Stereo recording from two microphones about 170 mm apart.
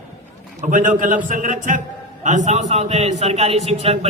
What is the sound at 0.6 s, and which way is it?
A man's voice, 50° right (ahead or behind).